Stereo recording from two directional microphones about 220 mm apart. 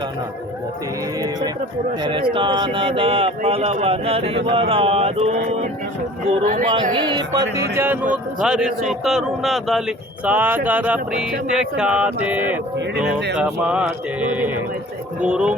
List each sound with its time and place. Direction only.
2.3 s speech: 20° right (ahead or behind)
6.4 s speech: 40° right (ahead or behind)
6.9 s a man's voice: 20° right (ahead or behind); by 9.8 s centre (ahead or behind)
10.2 s a sound: 10° right (ahead or behind)
11.5 s a man's voice: 5° right (ahead or behind)